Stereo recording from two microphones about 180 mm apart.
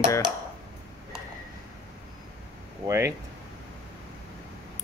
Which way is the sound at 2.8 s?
15° right (ahead or behind).